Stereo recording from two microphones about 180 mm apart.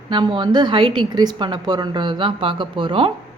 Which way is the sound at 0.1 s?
25° right (ahead or behind).